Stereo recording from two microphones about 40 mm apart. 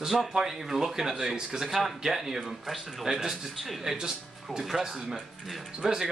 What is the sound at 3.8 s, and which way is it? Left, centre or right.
Speech, centre.